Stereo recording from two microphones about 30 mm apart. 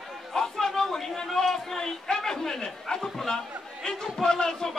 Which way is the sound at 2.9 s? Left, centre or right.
Centre.